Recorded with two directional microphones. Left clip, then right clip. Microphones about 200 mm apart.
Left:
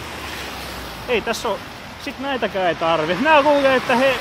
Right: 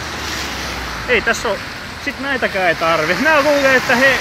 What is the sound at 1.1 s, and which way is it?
Speech, 25° left (ahead or behind).